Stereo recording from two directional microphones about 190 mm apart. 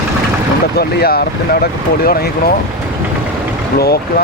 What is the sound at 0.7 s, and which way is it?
Speech, 55° left (ahead or behind).